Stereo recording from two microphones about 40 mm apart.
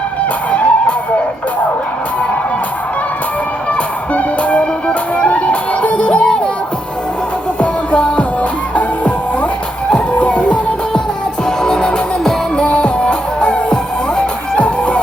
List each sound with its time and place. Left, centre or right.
0.5 s music: left
4.1 s music: left
7.6 s music: left
11.4 s music: centre